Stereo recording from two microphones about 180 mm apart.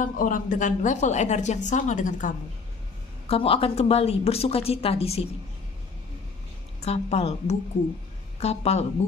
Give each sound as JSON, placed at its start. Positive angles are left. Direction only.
{"t": 0.0, "sound": "a woman's voice", "side_deg": 50}
{"t": 3.3, "sound": "a woman's voice", "side_deg": 30}
{"t": 6.8, "sound": "a woman's voice", "side_deg": 35}